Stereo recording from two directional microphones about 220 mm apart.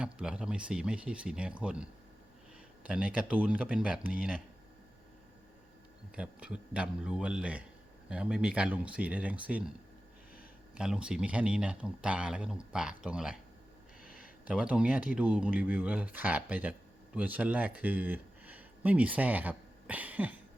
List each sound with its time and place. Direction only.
0.0 s speech: 5° right (ahead or behind)
6.1 s speech: 5° right (ahead or behind)
14.0 s a sound: 40° left (ahead or behind)
14.4 s speech: 5° right (ahead or behind)